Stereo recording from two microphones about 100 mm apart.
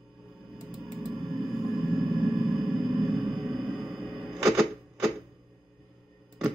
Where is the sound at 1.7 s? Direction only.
Centre (ahead or behind).